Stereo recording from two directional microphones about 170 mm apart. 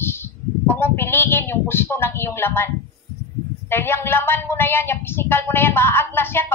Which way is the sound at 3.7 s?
15° left (ahead or behind).